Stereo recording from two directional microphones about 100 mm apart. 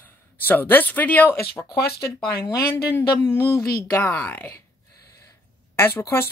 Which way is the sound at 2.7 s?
20° left (ahead or behind).